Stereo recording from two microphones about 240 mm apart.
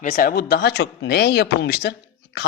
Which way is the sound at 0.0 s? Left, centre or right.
Left.